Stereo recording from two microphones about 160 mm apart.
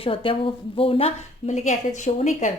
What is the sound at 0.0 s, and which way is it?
Speech, 35° left (ahead or behind).